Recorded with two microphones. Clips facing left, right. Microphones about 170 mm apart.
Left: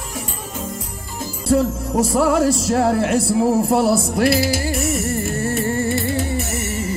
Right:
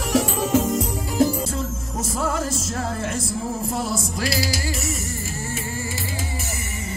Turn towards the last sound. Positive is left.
turn(degrees=65)  # may be behind; listen again after turning